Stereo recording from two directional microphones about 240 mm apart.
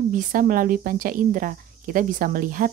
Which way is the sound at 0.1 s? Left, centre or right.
Right.